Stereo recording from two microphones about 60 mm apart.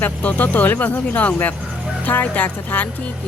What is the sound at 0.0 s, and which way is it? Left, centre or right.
Speech, left.